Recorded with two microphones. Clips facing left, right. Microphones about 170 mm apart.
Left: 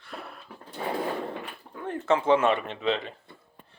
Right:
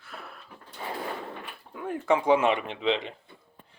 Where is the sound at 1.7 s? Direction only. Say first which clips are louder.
Even; 10° right (ahead or behind).